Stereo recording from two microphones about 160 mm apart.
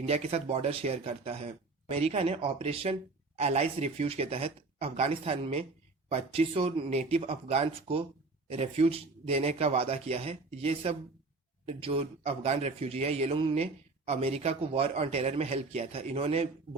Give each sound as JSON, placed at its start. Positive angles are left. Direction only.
{"t": 0.0, "sound": "speech", "side_deg": -40}